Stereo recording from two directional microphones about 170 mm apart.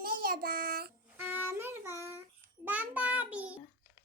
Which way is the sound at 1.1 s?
10° right (ahead or behind).